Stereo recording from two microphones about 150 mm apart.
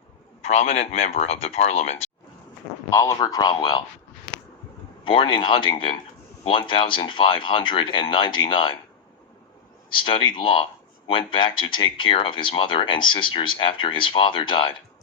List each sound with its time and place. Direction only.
0.4 s speech: 45° left (ahead or behind)
2.9 s speech: 20° left (ahead or behind)
5.0 s speech: 35° left (ahead or behind)
9.9 s speech: 35° left (ahead or behind)